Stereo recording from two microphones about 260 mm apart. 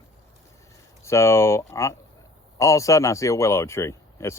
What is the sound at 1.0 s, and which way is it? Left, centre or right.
Speech, centre.